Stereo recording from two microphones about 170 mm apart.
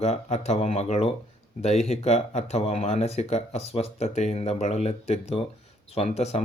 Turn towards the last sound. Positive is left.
turn(degrees=40)  # may be behind; listen again after turning